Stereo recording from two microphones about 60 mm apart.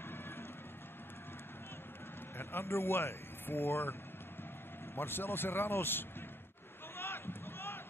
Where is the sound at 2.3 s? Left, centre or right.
Left.